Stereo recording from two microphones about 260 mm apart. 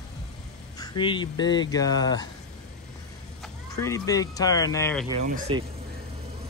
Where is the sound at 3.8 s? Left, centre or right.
Centre.